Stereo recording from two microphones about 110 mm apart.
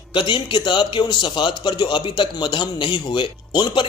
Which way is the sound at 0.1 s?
45° left (ahead or behind).